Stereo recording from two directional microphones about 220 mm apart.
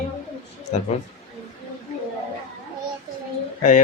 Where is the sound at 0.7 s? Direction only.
30° left (ahead or behind).